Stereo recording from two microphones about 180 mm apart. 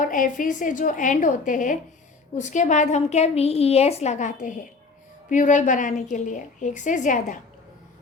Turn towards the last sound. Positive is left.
turn(degrees=45)  # may be behind; listen again after turning